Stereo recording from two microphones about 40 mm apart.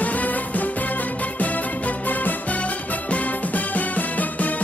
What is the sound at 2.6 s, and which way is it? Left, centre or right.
Music, left.